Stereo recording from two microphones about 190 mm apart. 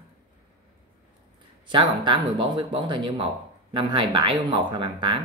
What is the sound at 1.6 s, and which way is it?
Speech, 25° right (ahead or behind).